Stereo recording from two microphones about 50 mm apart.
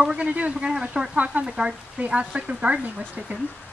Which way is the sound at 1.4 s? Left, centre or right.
Centre.